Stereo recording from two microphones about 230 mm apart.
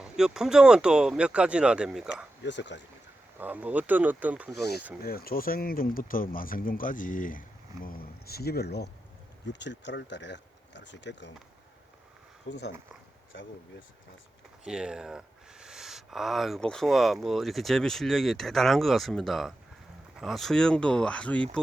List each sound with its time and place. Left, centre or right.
0.0 s speech: centre
2.4 s speech: left
3.3 s speech: centre
5.0 s speech: left
12.5 s speech: left
14.6 s speech: centre